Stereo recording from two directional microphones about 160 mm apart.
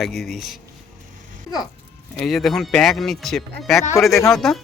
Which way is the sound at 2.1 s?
Centre (ahead or behind).